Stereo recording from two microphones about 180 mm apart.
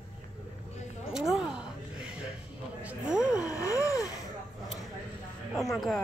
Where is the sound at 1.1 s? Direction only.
5° right (ahead or behind).